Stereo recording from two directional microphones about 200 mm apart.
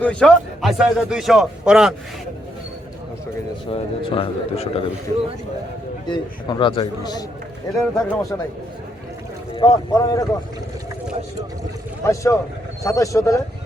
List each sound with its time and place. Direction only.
0.0 s a man's voice: 5° left (ahead or behind)
3.7 s a man's voice: 25° left (ahead or behind)
6.1 s a man's voice: 25° left (ahead or behind)
7.8 s a man's voice: centre (ahead or behind)
9.6 s speech: 20° left (ahead or behind)
12.0 s speech: 15° left (ahead or behind)